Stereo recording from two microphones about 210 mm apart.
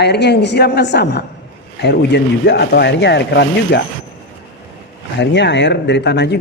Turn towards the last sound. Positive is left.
turn(degrees=55)  # may be behind; listen again after turning